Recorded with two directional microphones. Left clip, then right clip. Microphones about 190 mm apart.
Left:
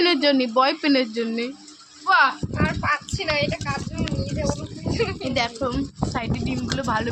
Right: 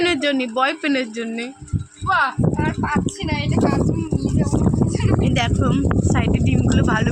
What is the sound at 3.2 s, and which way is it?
Speech, 25° left (ahead or behind).